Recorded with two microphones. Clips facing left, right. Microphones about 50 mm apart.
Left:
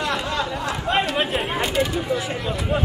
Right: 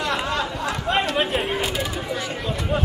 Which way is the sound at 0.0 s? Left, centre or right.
Centre.